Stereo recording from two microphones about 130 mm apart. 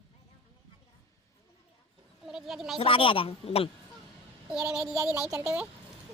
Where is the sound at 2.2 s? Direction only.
5° right (ahead or behind).